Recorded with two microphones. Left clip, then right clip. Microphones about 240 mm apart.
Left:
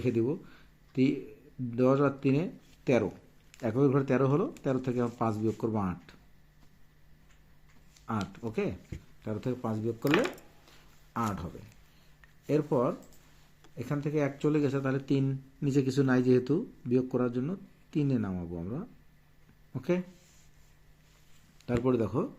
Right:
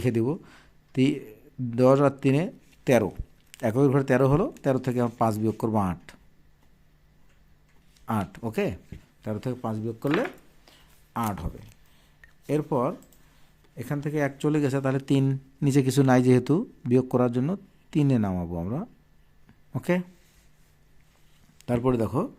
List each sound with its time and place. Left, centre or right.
0.0 s speech: right
8.0 s speech: right
10.7 s a sound: right
12.2 s speech: right
21.8 s speech: right